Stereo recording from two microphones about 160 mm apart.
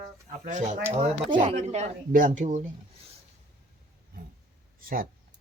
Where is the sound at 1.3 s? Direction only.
35° right (ahead or behind); by 2.6 s 50° right (ahead or behind).